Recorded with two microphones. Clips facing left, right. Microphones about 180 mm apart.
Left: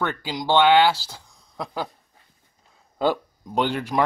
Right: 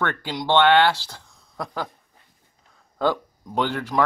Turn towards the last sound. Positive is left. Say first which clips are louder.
# even
turn(degrees=15)  # may be behind; listen again after turning